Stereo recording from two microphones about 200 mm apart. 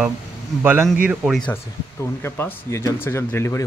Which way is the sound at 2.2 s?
10° left (ahead or behind).